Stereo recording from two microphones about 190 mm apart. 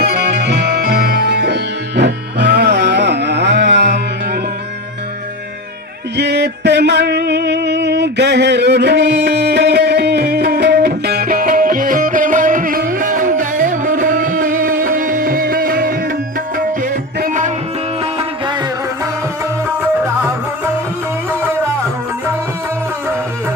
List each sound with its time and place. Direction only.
0.0 s music: 60° right (ahead or behind)
6.1 s music: 60° right (ahead or behind); by 17.5 s 40° right (ahead or behind)
18.0 s music: 30° right (ahead or behind)